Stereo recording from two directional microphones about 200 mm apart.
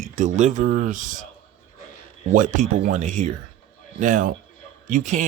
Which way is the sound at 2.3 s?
40° right (ahead or behind).